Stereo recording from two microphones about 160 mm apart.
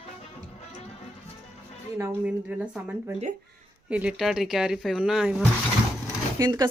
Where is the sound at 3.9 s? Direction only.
5° right (ahead or behind).